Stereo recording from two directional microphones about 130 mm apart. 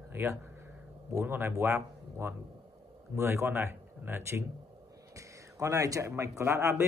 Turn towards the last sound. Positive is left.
turn(degrees=-20)  # may be behind; listen again after turning